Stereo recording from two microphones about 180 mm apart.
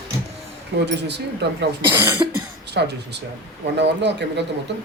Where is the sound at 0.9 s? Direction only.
70° right (ahead or behind).